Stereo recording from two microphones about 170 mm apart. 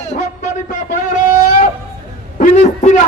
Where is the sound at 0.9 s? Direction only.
50° left (ahead or behind).